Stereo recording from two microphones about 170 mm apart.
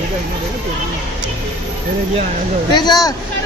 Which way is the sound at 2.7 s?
25° left (ahead or behind).